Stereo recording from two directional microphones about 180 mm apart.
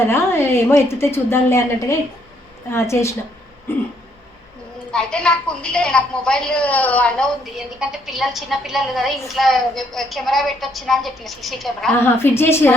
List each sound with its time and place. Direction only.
0.1 s a woman's voice: 15° left (ahead or behind)
4.9 s a woman's voice: 5° left (ahead or behind)
11.9 s a woman's voice: 15° left (ahead or behind)